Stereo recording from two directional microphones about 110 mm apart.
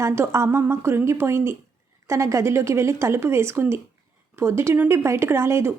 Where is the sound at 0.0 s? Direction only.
25° right (ahead or behind).